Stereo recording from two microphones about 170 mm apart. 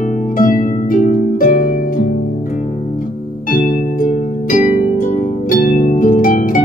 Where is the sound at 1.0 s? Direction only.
55° left (ahead or behind).